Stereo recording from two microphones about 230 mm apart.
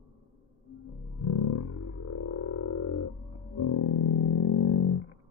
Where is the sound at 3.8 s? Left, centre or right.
Left.